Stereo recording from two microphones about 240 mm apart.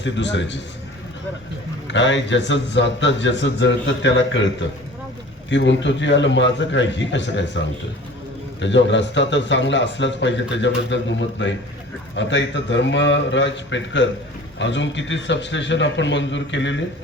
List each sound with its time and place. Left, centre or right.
0.0 s a man's voice: left
1.9 s a man's voice: left
5.5 s a man's voice: left
8.6 s a man's voice: left